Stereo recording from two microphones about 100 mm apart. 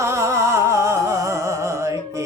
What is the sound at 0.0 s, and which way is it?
Music, 30° right (ahead or behind).